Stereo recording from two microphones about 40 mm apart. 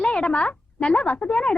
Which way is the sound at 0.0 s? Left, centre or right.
Left.